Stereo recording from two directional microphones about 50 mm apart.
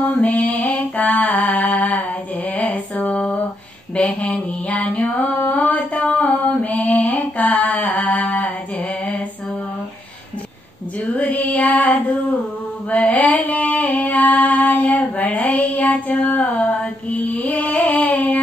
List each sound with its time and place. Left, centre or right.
0.2 s mantra: left
2.5 s music: left
3.1 s a sound: centre
4.1 s music: left
5.0 s a sound: left
5.5 s singing: left
6.2 s a sound: left
11.1 s music: left
12.9 s female singing: left
16.3 s music: left